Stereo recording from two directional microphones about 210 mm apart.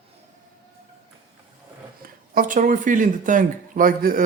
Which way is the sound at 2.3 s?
40° right (ahead or behind).